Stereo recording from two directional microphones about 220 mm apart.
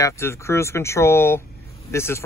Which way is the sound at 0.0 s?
10° left (ahead or behind).